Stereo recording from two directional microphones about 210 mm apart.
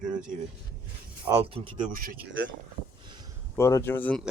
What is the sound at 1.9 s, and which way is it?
Speech, 40° right (ahead or behind).